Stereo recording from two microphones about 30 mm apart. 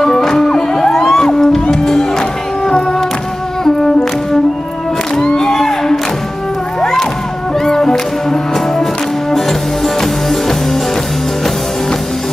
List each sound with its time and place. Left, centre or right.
0.2 s music: centre
5.1 s music: centre
7.6 s music: centre